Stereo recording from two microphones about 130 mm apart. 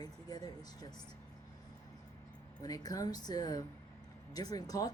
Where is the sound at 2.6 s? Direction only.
30° left (ahead or behind).